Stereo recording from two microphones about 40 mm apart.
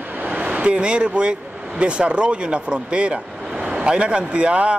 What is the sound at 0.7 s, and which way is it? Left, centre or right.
Speech, right.